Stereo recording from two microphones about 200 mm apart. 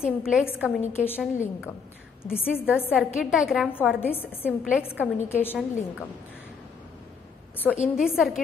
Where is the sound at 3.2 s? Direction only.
5° right (ahead or behind).